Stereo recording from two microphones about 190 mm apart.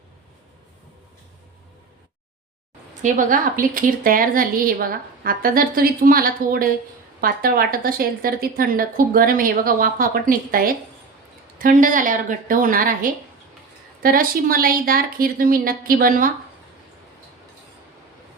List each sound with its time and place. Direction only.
3.0 s a woman's voice: 45° right (ahead or behind)